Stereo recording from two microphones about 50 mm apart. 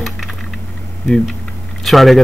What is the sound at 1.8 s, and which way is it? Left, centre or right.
Speech, centre.